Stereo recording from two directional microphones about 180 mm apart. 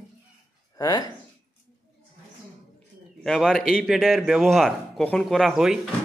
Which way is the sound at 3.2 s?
Centre (ahead or behind).